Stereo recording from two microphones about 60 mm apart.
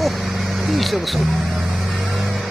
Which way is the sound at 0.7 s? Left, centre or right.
Centre.